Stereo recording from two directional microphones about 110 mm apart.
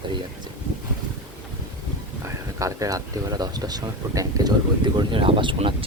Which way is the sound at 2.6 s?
30° right (ahead or behind).